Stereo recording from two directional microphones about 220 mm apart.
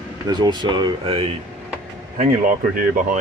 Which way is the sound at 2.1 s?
40° right (ahead or behind).